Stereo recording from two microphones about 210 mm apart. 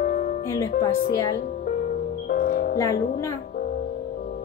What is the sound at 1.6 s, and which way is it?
Music, 40° left (ahead or behind).